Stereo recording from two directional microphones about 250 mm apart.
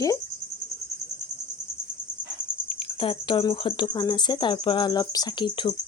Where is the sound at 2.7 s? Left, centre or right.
Left.